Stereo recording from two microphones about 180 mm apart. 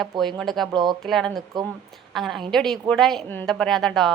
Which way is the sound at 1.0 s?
Centre (ahead or behind).